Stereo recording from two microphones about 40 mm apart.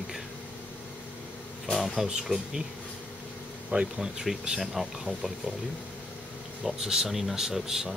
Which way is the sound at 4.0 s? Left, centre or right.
Centre.